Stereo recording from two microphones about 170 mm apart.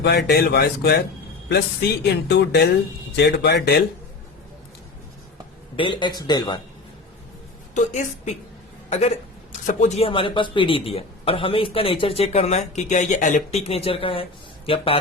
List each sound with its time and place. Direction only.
0.0 s speech: 75° left (ahead or behind)
2.2 s speech: 80° left
5.7 s a man's voice: 30° left (ahead or behind)
7.7 s a woman's voice: 45° left (ahead or behind)